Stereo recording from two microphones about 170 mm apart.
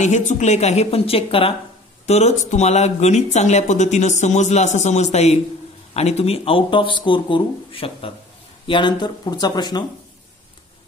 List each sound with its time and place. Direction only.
0.0 s speech: 45° left (ahead or behind); by 9.8 s 25° left (ahead or behind)